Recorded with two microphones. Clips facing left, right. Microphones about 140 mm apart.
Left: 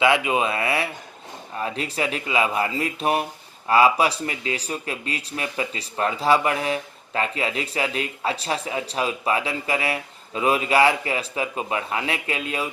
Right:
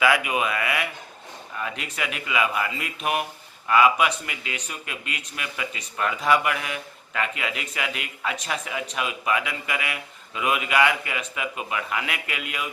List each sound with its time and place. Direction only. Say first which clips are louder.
0.0 s speech: left 2 dB; 25° left (ahead or behind)